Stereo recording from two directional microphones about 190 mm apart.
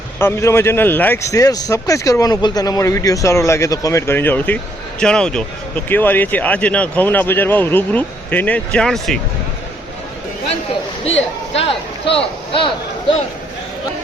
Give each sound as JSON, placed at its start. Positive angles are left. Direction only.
{"t": 0.2, "sound": "speech", "side_deg": 15}
{"t": 11.5, "sound": "speech", "side_deg": 30}